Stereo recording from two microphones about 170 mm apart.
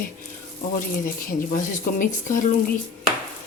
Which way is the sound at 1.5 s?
50° left (ahead or behind).